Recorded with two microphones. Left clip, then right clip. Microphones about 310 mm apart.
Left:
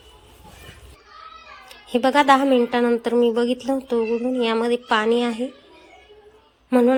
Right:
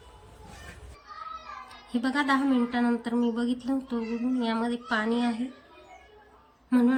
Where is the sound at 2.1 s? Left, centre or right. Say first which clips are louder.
Left 10 dB; centre.